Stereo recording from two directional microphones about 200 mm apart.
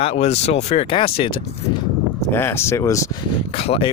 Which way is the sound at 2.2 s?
10° left (ahead or behind).